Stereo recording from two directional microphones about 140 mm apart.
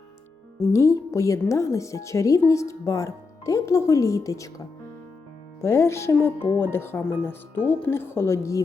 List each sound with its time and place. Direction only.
0.7 s a woman's voice: 20° left (ahead or behind)
5.6 s speech: 20° left (ahead or behind)